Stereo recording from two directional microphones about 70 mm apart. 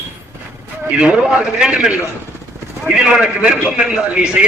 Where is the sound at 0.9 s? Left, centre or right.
Centre.